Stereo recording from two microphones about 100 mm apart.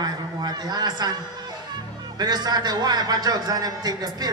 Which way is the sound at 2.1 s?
45° right (ahead or behind).